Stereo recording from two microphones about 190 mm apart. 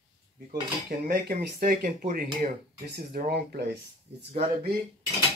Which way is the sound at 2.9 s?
55° right (ahead or behind).